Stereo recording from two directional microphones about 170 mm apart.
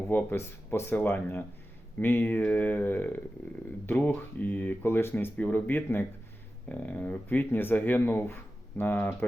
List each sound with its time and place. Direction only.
0.1 s speech: 10° left (ahead or behind)